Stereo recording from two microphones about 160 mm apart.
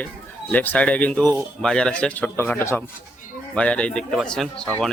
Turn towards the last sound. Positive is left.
turn(degrees=5)  # may be behind; listen again after turning